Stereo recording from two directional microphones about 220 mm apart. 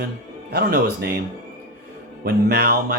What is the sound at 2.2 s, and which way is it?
Speech, 45° right (ahead or behind).